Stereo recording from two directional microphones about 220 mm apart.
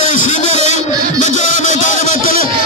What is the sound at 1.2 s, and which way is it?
Music, 35° left (ahead or behind).